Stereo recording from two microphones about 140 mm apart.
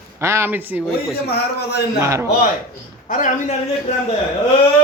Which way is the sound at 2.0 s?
20° right (ahead or behind).